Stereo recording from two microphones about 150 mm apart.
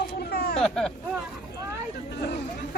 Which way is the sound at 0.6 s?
5° left (ahead or behind).